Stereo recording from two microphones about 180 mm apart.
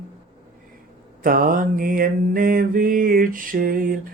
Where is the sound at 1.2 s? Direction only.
50° right (ahead or behind).